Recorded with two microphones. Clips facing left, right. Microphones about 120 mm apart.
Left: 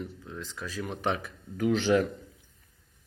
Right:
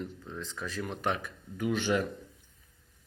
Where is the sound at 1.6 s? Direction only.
45° left (ahead or behind).